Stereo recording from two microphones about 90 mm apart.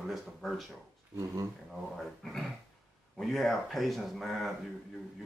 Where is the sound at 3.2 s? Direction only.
5° left (ahead or behind).